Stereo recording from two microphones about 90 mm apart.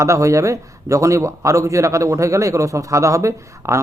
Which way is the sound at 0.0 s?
35° right (ahead or behind).